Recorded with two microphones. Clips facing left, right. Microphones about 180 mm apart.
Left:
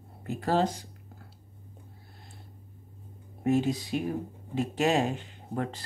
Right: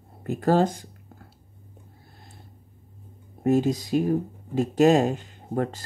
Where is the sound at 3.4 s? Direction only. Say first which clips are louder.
Right 4 dB; 40° right (ahead or behind).